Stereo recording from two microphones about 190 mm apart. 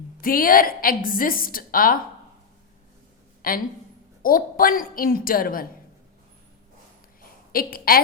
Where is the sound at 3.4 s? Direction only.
50° left (ahead or behind).